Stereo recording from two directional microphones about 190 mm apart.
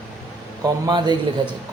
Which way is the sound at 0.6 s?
20° right (ahead or behind).